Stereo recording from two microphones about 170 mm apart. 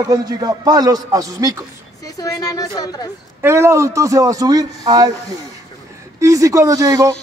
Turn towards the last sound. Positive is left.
turn(degrees=-20)  # may be behind; listen again after turning